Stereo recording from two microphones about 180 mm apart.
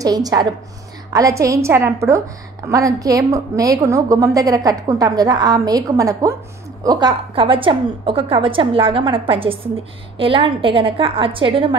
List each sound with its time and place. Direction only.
0.0 s a woman's voice: 20° right (ahead or behind)